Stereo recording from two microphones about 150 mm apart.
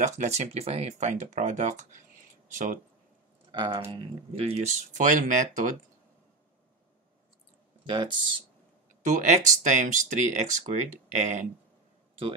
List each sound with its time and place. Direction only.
0.0 s speech: 50° right (ahead or behind)
3.5 s speech: 30° right (ahead or behind); by 5.7 s 60° right (ahead or behind)
7.8 s speech: 35° right (ahead or behind)
9.0 s speech: 55° right (ahead or behind)